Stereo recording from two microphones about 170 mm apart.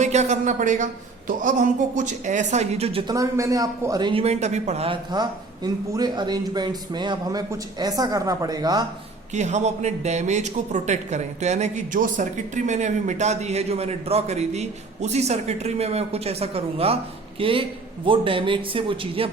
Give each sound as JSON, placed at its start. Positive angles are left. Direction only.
{"t": 0.0, "sound": "speech", "side_deg": -40}
{"t": 3.1, "sound": "speech", "side_deg": -20}
{"t": 5.1, "sound": "speech", "side_deg": -25}
{"t": 9.3, "sound": "speech", "side_deg": -45}